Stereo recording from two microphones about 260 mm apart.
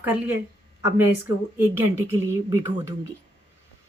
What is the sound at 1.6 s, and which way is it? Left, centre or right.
A woman's voice, centre.